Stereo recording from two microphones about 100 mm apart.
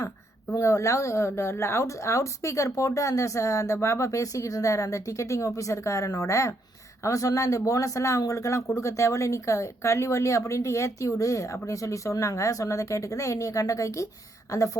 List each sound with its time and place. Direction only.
0.5 s speech: 30° left (ahead or behind)